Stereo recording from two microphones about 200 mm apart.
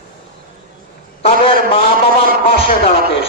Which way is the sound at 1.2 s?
30° left (ahead or behind).